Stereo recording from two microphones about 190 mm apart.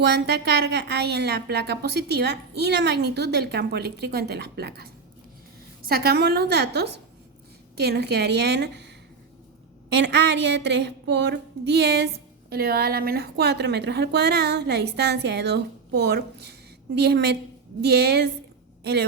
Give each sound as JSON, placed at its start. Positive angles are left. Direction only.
{"t": 0.0, "sound": "a woman's voice", "side_deg": -60}
{"t": 9.9, "sound": "a woman's voice", "side_deg": -60}